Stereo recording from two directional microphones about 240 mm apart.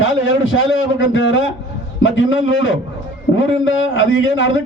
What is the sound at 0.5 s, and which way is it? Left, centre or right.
A man's voice, left.